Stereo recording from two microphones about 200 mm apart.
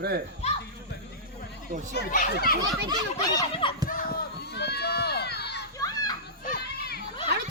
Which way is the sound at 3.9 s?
45° left (ahead or behind).